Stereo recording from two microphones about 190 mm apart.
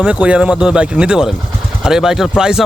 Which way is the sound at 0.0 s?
5° right (ahead or behind).